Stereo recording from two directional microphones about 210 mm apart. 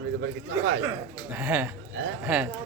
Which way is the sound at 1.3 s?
10° right (ahead or behind).